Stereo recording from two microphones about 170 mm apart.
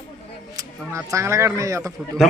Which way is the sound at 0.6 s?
15° right (ahead or behind).